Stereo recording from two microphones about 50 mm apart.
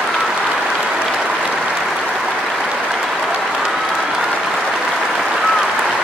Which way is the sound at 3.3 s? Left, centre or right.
Centre.